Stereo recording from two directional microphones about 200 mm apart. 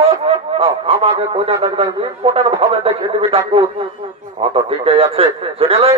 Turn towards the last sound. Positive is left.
turn(degrees=-30)  # may be behind; listen again after turning